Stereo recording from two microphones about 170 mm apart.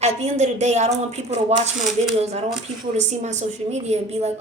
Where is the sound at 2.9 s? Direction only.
45° right (ahead or behind).